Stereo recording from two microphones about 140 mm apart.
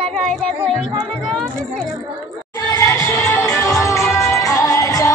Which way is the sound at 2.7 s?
25° left (ahead or behind).